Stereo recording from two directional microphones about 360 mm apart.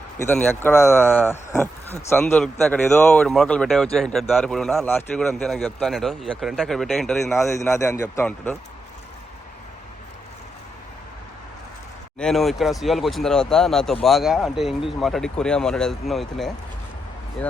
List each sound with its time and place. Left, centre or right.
0.3 s speech: centre
12.2 s speech: centre